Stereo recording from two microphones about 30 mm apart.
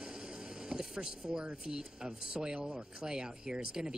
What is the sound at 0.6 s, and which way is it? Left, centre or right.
Speech, right.